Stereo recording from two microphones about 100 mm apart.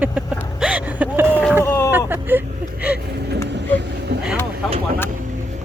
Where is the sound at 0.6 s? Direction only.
15° right (ahead or behind).